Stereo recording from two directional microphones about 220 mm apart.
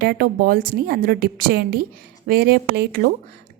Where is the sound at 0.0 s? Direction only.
45° right (ahead or behind).